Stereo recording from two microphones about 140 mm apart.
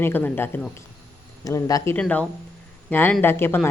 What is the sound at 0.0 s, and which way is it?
Speech, 15° left (ahead or behind).